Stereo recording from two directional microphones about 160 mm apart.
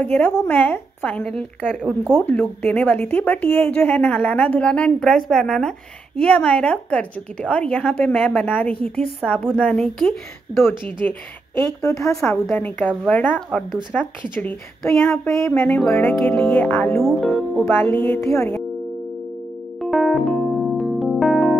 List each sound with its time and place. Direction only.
0.0 s a woman's voice: 10° left (ahead or behind)
2.1 s a woman's voice: 10° left (ahead or behind)
11.1 s a woman's voice: 15° left (ahead or behind)
17.0 s a woman's voice: centre (ahead or behind)
17.6 s a woman's voice: 10° left (ahead or behind)
19.8 s electric piano: centre (ahead or behind)